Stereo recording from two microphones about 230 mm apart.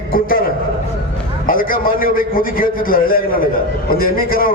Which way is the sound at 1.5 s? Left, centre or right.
Left.